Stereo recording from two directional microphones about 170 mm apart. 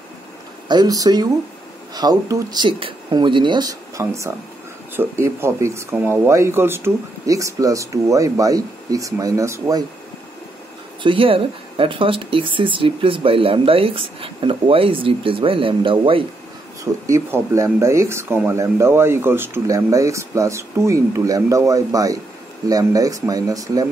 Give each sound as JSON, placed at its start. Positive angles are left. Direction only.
{"t": 0.7, "sound": "speech", "side_deg": -20}
{"t": 11.0, "sound": "speech", "side_deg": -30}
{"t": 16.8, "sound": "speech", "side_deg": -20}